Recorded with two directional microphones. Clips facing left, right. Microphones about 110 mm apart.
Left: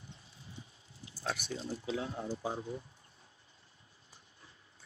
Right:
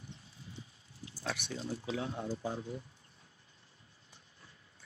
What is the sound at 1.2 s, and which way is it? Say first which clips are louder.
Speech: left 1 dB; 35° left (ahead or behind).